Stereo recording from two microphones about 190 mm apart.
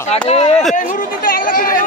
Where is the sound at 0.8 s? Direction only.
45° left (ahead or behind).